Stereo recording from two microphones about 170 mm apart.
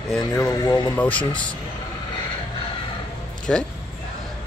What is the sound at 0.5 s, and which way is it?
Speech, 20° left (ahead or behind).